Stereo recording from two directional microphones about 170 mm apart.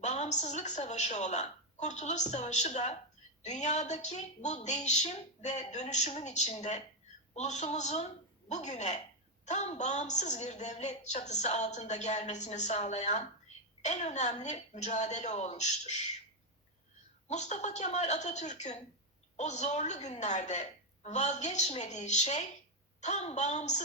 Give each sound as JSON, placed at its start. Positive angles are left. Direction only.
{"t": 0.0, "sound": "a woman's voice", "side_deg": 45}
{"t": 17.2, "sound": "a woman's voice", "side_deg": 45}